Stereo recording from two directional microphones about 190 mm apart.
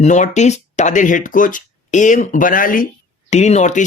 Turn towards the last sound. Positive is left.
turn(degrees=40)  # may be behind; listen again after turning